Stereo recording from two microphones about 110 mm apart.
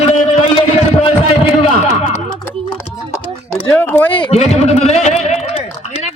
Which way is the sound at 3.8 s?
15° left (ahead or behind).